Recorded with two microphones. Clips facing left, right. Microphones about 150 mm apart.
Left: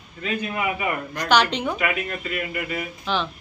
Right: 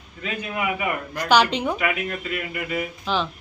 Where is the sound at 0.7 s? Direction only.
10° right (ahead or behind).